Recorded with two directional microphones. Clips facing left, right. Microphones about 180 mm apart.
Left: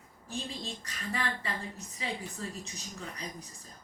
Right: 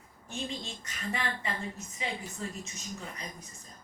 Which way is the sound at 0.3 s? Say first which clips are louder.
Right 1 dB; 35° left (ahead or behind).